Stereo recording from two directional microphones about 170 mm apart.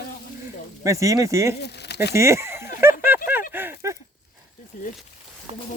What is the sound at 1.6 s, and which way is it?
Speech, 75° left (ahead or behind).